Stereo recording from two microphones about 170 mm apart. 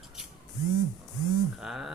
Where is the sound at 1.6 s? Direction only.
Centre (ahead or behind).